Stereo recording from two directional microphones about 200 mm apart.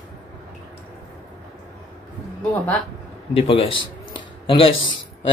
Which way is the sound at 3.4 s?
25° left (ahead or behind).